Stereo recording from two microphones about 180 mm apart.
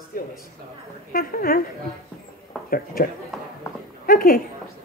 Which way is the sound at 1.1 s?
55° left (ahead or behind).